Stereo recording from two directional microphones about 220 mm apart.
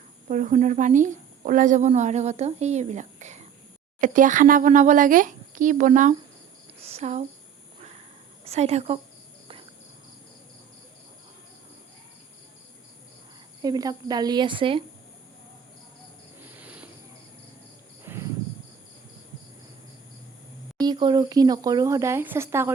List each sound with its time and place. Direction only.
0.3 s a woman's voice: 35° right (ahead or behind)
8.4 s speech: 30° right (ahead or behind)
13.6 s speech: 15° right (ahead or behind)
16.4 s cricket: 10° right (ahead or behind)
18.0 s cricket: 10° right (ahead or behind)
20.8 s speech: 20° right (ahead or behind)